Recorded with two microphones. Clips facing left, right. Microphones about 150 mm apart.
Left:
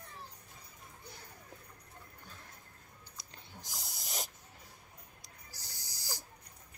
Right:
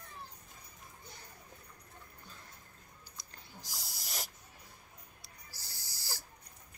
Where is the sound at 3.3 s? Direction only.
20° left (ahead or behind).